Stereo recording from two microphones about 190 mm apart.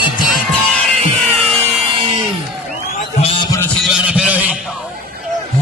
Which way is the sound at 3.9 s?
5° right (ahead or behind).